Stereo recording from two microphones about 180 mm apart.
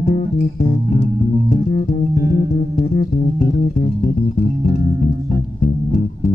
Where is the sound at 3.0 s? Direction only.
50° left (ahead or behind).